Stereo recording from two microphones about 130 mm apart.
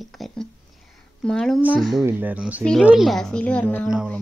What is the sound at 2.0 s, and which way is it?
A woman's voice, 15° right (ahead or behind).